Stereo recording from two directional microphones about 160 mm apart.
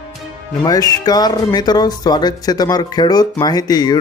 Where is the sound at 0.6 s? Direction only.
25° left (ahead or behind).